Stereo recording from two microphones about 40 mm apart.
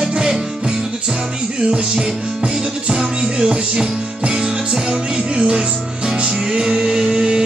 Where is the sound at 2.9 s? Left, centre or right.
Centre.